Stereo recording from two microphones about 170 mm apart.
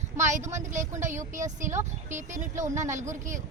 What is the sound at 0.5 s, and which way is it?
Speech, 45° right (ahead or behind).